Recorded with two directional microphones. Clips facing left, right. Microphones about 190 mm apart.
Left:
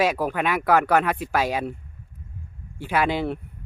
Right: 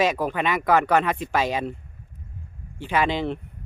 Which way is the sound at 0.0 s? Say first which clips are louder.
Even; 10° left (ahead or behind).